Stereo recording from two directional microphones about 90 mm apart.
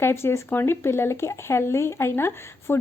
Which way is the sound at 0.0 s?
25° left (ahead or behind).